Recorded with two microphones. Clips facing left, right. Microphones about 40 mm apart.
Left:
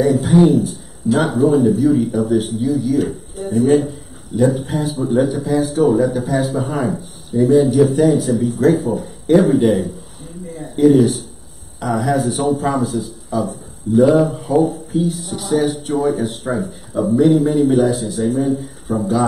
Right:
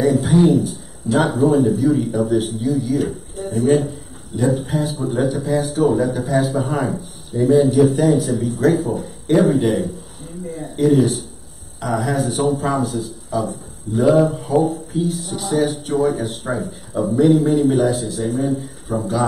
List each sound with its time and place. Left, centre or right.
0.0 s speech: centre